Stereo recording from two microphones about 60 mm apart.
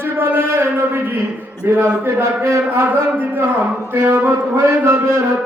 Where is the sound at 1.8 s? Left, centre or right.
Right.